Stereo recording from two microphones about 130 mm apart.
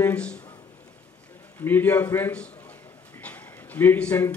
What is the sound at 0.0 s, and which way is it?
Speech, 10° left (ahead or behind).